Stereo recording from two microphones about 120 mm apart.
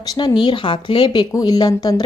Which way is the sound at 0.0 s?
35° left (ahead or behind).